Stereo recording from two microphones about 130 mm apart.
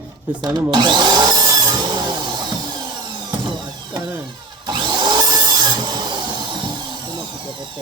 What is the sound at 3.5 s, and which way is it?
Vehicle, 35° right (ahead or behind).